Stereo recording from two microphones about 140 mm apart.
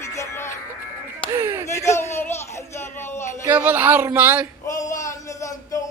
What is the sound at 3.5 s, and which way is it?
Speech, 10° right (ahead or behind).